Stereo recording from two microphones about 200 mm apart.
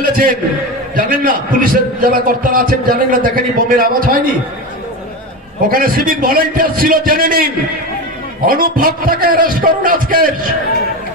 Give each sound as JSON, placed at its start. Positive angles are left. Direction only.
{"t": 0.1, "sound": "a man's voice", "side_deg": -45}
{"t": 5.7, "sound": "a man's voice", "side_deg": -45}